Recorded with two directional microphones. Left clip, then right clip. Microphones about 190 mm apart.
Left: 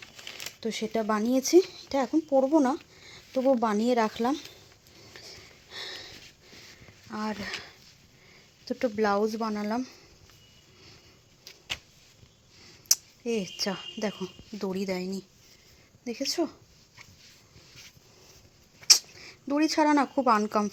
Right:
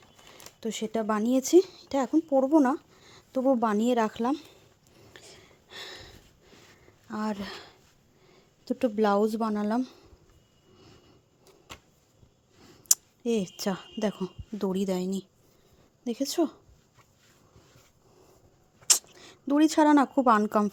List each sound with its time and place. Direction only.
0.6 s speech: 15° right (ahead or behind)
5.0 s a sound: 15° right (ahead or behind)
7.1 s a sound: 35° right (ahead or behind)
8.7 s a woman's voice: 35° right (ahead or behind)
13.2 s a woman's voice: 40° right (ahead or behind)
16.3 s a woman's voice: 40° right (ahead or behind)
18.9 s speech: 35° right (ahead or behind)